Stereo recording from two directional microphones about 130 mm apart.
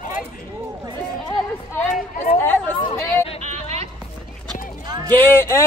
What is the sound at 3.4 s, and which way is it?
Music, 55° right (ahead or behind).